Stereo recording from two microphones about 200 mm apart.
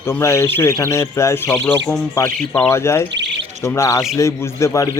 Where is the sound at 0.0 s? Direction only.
10° left (ahead or behind).